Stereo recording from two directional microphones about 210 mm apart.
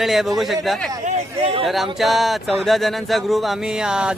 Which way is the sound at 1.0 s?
30° right (ahead or behind).